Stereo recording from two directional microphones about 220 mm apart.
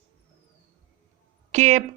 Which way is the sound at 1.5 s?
30° right (ahead or behind).